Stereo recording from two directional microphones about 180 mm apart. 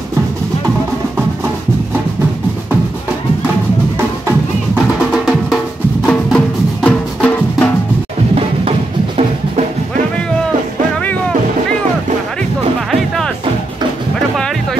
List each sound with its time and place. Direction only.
5.1 s drum: centre (ahead or behind)
6.0 s music: 5° left (ahead or behind)
8.4 s drum: 30° right (ahead or behind)
14.3 s music: centre (ahead or behind)